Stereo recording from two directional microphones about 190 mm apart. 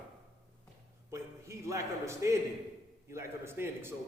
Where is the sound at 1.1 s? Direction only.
15° right (ahead or behind).